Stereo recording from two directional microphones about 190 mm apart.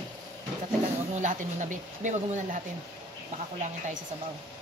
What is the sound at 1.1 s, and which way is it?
Speech, 40° right (ahead or behind).